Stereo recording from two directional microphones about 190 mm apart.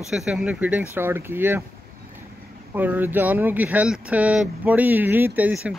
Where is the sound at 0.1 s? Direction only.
5° right (ahead or behind).